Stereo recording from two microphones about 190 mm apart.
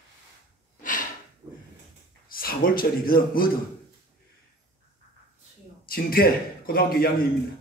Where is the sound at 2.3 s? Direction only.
50° left (ahead or behind).